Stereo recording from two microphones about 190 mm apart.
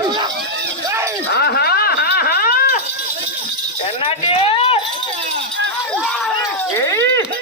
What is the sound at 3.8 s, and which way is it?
Keys jangling, 30° left (ahead or behind).